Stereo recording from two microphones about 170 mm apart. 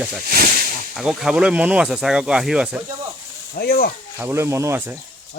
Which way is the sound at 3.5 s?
60° left (ahead or behind).